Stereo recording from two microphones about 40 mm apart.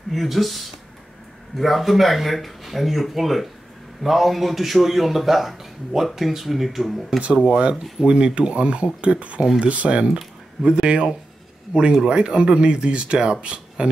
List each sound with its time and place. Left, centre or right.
0.1 s a man's voice: centre
7.4 s speech: right